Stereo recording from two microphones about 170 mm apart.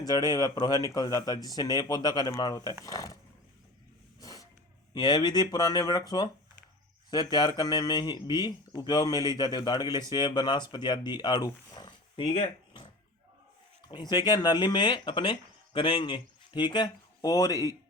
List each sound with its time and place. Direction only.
0.0 s speech: 25° left (ahead or behind)
4.2 s a sound: 20° left (ahead or behind)
4.9 s speech: 25° left (ahead or behind)